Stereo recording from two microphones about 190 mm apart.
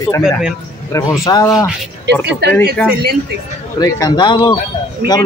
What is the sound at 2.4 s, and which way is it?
Speech, 60° right (ahead or behind).